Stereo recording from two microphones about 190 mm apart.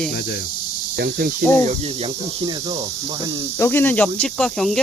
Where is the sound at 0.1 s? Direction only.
60° left (ahead or behind).